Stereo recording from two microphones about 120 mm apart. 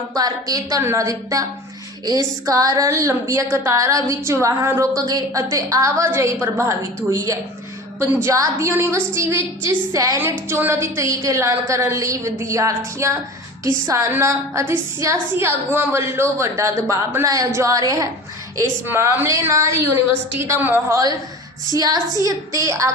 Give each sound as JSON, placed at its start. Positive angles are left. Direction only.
{"t": 0.1, "sound": "a woman's voice", "side_deg": -30}
{"t": 10.2, "sound": "a woman's voice", "side_deg": -15}
{"t": 21.8, "sound": "a woman's voice", "side_deg": -30}